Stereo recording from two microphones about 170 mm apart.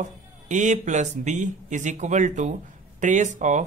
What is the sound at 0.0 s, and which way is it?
Speech, 45° right (ahead or behind).